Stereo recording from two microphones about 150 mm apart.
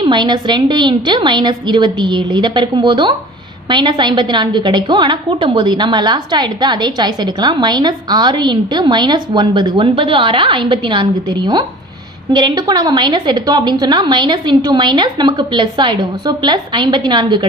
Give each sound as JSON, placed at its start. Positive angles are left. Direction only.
{"t": 0.0, "sound": "a woman's voice", "side_deg": -30}